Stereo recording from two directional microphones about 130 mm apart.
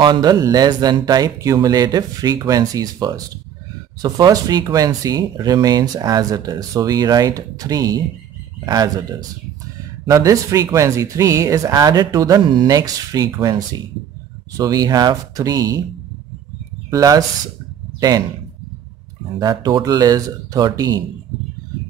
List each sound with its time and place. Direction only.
0.0 s speech: 30° right (ahead or behind)
16.9 s speech: 25° right (ahead or behind)
19.3 s speech: 30° right (ahead or behind)